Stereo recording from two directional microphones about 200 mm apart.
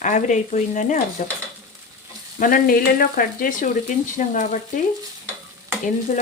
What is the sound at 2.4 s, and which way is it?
Speech, 45° left (ahead or behind).